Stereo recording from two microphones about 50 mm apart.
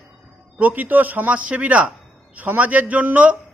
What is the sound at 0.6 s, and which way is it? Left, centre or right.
A man's voice, right.